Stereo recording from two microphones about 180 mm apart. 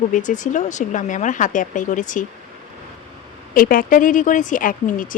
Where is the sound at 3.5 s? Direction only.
55° left (ahead or behind).